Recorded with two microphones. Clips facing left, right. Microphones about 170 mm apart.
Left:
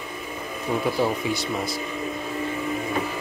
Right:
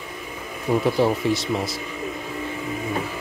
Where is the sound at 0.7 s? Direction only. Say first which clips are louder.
Right 4 dB; 10° right (ahead or behind).